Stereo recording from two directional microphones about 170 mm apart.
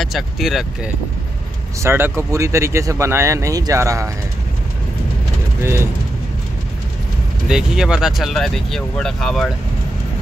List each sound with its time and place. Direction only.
0.0 s speech: centre (ahead or behind)
1.8 s speech: 15° right (ahead or behind)
5.6 s speech: 15° right (ahead or behind)
7.4 s speech: 5° right (ahead or behind)